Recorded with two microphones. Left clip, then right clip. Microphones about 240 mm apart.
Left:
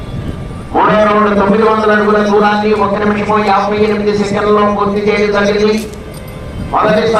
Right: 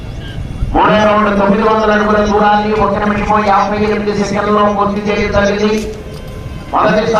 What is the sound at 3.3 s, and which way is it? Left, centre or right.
A man's voice, left.